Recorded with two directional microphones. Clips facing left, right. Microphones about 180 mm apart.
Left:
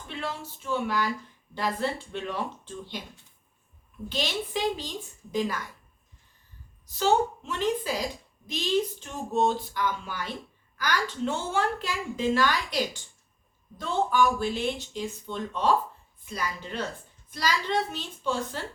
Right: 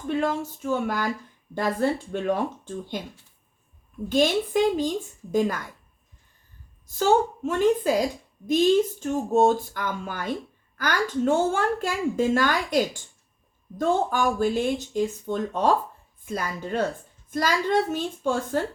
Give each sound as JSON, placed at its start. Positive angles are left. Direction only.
{"t": 0.1, "sound": "a woman's voice", "side_deg": -45}
{"t": 4.1, "sound": "a woman's voice", "side_deg": -50}
{"t": 6.8, "sound": "a woman's voice", "side_deg": -45}